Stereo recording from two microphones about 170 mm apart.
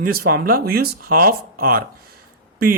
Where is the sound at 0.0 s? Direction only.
60° right (ahead or behind).